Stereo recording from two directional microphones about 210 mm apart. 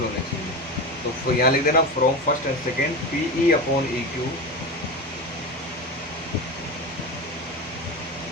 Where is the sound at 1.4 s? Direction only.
45° left (ahead or behind).